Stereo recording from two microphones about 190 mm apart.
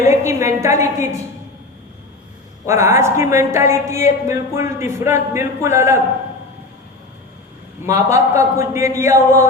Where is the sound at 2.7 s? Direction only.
15° right (ahead or behind).